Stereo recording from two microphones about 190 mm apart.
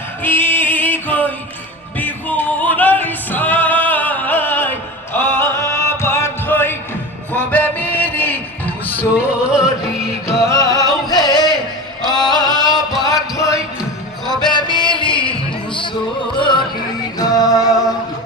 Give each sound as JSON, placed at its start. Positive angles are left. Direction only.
{"t": 0.2, "sound": "music", "side_deg": 10}
{"t": 7.3, "sound": "a sound", "side_deg": 10}
{"t": 9.4, "sound": "music", "side_deg": -5}
{"t": 10.4, "sound": "music", "side_deg": 15}
{"t": 12.1, "sound": "male singing", "side_deg": 0}
{"t": 12.4, "sound": "music", "side_deg": 20}